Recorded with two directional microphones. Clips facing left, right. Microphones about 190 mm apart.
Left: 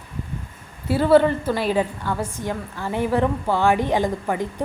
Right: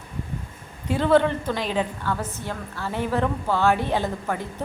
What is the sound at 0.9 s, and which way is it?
A woman's voice, 10° left (ahead or behind).